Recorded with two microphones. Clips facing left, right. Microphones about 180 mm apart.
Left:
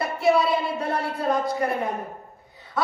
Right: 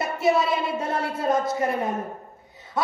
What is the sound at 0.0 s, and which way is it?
Speech, 20° right (ahead or behind).